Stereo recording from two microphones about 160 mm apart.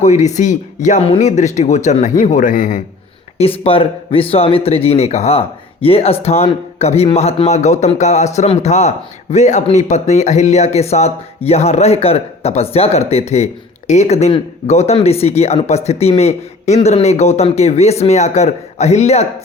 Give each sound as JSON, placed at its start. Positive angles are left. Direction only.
{"t": 0.0, "sound": "speech", "side_deg": 45}
{"t": 3.3, "sound": "speech", "side_deg": 40}